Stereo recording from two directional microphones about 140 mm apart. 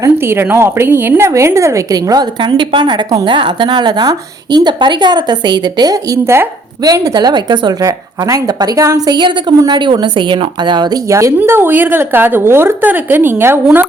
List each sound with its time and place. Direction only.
0.0 s a woman's voice: 15° right (ahead or behind)